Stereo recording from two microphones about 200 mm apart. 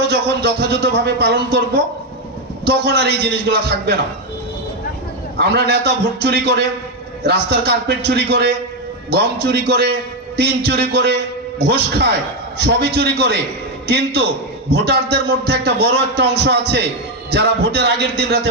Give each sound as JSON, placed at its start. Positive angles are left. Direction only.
{"t": 0.1, "sound": "a man's voice", "side_deg": -55}
{"t": 5.4, "sound": "a man's voice", "side_deg": -55}